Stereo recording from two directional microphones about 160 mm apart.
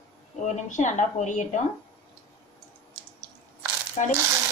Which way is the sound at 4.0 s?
45° left (ahead or behind).